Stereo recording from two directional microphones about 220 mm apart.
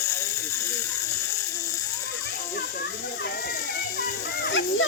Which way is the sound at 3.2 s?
45° left (ahead or behind).